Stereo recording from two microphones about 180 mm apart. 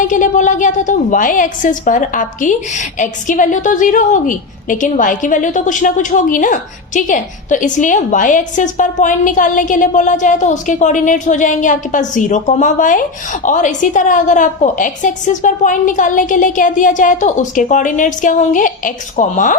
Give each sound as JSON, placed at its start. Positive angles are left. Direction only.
{"t": 0.1, "sound": "a woman's voice", "side_deg": 45}